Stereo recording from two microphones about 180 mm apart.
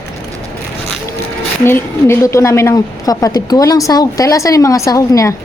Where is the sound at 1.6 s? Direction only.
15° left (ahead or behind).